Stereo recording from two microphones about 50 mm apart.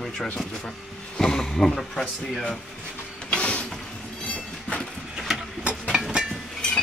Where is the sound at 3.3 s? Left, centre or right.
Left.